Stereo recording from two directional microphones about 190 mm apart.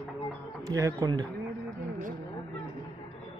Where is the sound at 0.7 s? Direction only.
15° right (ahead or behind).